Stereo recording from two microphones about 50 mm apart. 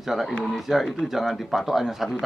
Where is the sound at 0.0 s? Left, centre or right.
Centre.